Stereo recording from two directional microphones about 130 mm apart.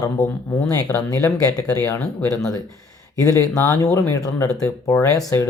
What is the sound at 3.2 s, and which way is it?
Speech, 25° left (ahead or behind).